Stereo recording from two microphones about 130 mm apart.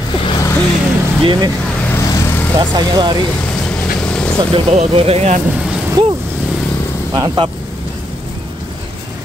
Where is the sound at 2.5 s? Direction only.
30° right (ahead or behind).